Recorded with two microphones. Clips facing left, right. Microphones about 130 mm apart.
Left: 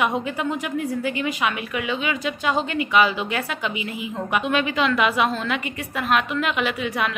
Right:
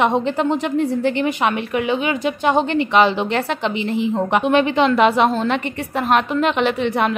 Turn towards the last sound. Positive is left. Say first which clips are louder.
# right 6 dB
turn(degrees=-35)  # may be behind; listen again after turning